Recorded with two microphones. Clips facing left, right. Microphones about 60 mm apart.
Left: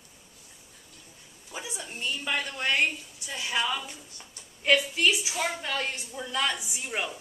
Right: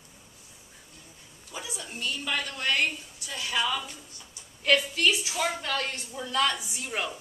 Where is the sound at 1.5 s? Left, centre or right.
Left.